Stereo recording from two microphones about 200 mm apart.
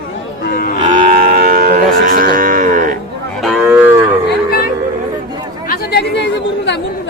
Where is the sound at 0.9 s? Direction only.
45° right (ahead or behind).